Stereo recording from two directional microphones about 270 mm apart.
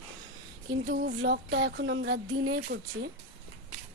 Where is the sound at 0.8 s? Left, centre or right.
Right.